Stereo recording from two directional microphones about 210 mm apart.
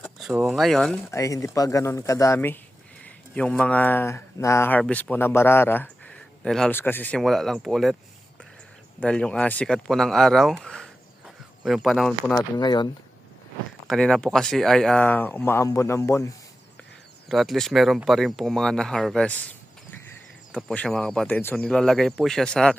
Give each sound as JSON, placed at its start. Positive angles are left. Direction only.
{"t": 0.0, "sound": "speech", "side_deg": 0}
{"t": 1.1, "sound": "speech", "side_deg": 15}
{"t": 9.0, "sound": "speech", "side_deg": 5}
{"t": 12.4, "sound": "speech", "side_deg": 20}
{"t": 13.8, "sound": "speech", "side_deg": 0}
{"t": 17.2, "sound": "speech", "side_deg": 0}